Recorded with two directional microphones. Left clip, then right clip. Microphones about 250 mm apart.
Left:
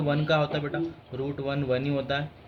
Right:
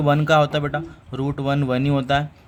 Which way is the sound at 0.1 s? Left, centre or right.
Right.